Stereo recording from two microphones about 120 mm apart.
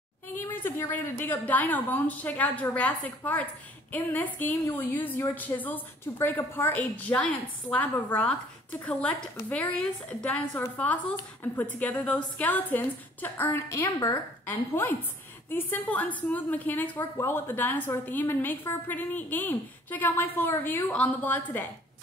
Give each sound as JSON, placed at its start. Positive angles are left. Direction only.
{"t": 0.5, "sound": "a woman's voice", "side_deg": 20}
{"t": 9.5, "sound": "a woman's voice", "side_deg": 10}
{"t": 11.8, "sound": "a woman's voice", "side_deg": 10}
{"t": 14.4, "sound": "a woman's voice", "side_deg": 15}